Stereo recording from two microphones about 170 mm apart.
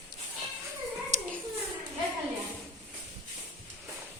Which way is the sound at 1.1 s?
40° right (ahead or behind).